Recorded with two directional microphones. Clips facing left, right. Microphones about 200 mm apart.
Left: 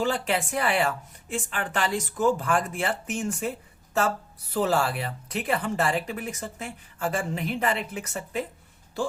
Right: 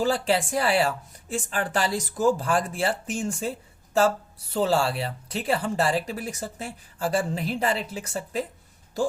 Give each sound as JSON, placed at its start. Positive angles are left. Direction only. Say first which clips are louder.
{"t": 0.0, "sound": "speech", "louder": "right 3 dB", "side_deg": -35}
{"t": 4.5, "sound": "speech", "louder": "right 1 dB", "side_deg": -30}